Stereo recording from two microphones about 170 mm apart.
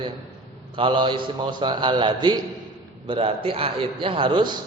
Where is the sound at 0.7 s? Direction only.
30° right (ahead or behind).